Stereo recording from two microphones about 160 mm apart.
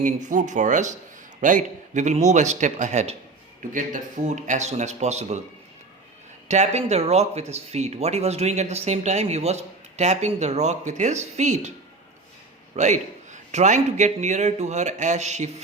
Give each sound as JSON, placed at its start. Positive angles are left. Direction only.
{"t": 0.0, "sound": "speech", "side_deg": -50}
{"t": 6.5, "sound": "speech", "side_deg": -45}
{"t": 12.7, "sound": "speech", "side_deg": -50}